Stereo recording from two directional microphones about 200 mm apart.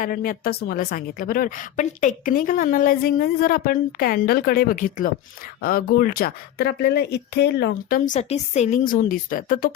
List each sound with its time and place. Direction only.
0.0 s a woman's voice: 45° left (ahead or behind)